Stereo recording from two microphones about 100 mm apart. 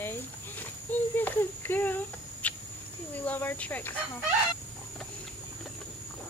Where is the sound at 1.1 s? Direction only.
20° left (ahead or behind).